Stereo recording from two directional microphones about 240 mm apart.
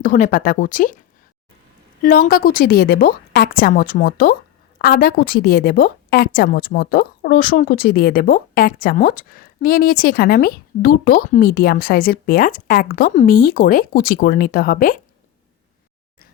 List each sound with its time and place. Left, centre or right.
0.0 s a woman's voice: left
2.0 s a woman's voice: left